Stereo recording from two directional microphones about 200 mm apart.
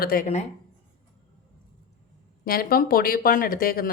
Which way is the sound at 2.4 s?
45° left (ahead or behind).